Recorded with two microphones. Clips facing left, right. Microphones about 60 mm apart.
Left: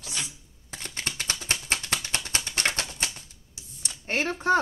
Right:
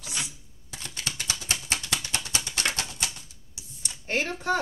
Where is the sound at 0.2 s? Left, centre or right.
Left.